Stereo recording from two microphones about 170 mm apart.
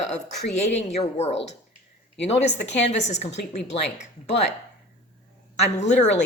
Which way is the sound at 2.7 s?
40° left (ahead or behind).